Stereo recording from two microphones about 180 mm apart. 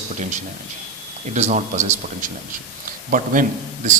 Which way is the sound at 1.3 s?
40° right (ahead or behind).